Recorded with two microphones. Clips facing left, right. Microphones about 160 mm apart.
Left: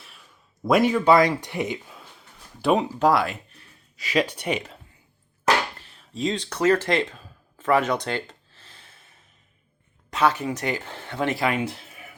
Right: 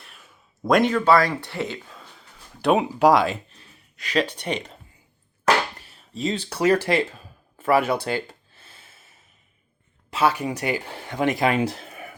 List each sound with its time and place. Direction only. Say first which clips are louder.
0.7 s speech: even; 10° left (ahead or behind)
2.6 s speech: right 1 dB; centre (ahead or behind)
3.0 s speech: right 5 dB; 15° right (ahead or behind)
3.9 s speech: even; 5° left (ahead or behind)
5.8 s speech: left 1 dB; 5° right (ahead or behind)
7.6 s a sound: right 1 dB; 10° right (ahead or behind)
10.2 s speech: even; 10° right (ahead or behind)
11.4 s a sound: right 3 dB; 35° right (ahead or behind)